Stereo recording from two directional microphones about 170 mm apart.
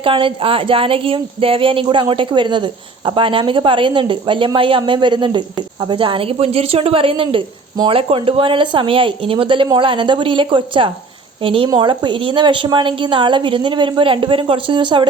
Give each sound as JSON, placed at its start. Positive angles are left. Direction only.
{"t": 0.0, "sound": "a woman's voice", "side_deg": -30}